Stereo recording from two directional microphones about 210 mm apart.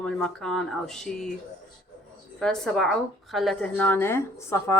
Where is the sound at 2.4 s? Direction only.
5° left (ahead or behind).